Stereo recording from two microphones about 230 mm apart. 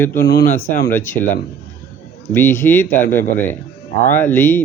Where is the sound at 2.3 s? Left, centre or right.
Centre.